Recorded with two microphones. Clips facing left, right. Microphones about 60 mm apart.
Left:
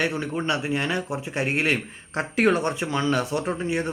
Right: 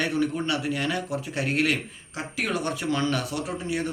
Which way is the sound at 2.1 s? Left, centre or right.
Left.